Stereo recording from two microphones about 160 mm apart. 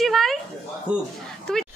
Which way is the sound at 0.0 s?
Centre (ahead or behind).